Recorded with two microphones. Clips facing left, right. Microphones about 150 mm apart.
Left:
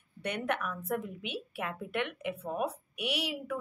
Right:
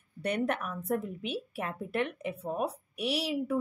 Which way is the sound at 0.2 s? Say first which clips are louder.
Right 3 dB; 35° right (ahead or behind).